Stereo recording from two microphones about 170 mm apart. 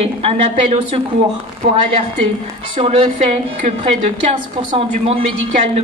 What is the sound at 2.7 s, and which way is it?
A woman's voice, 35° right (ahead or behind).